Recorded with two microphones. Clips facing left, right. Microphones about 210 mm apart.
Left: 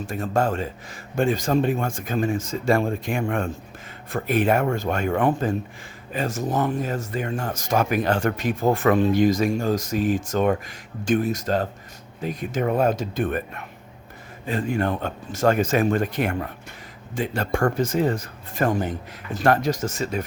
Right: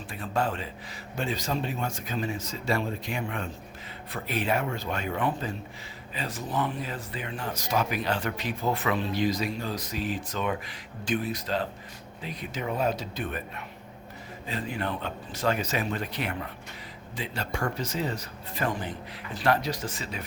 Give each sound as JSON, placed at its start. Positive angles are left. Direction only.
{"t": 0.0, "sound": "speech", "side_deg": 45}